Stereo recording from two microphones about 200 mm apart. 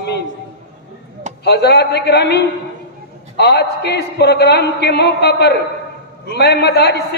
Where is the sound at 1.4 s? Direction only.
55° left (ahead or behind).